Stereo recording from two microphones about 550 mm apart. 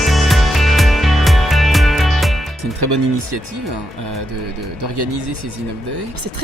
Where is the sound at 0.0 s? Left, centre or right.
Centre.